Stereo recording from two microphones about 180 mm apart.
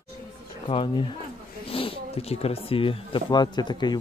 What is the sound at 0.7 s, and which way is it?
Speech, 30° left (ahead or behind).